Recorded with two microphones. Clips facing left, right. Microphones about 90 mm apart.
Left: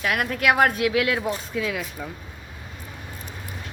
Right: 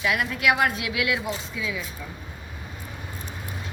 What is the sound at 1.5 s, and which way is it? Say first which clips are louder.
Speech: left 4 dB; 55° left (ahead or behind).